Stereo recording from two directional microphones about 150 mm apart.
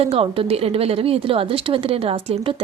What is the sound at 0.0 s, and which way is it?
A woman's voice, 40° right (ahead or behind).